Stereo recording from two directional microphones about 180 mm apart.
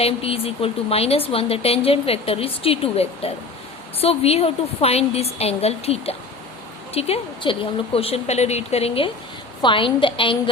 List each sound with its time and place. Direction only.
0.0 s a woman's voice: 35° left (ahead or behind)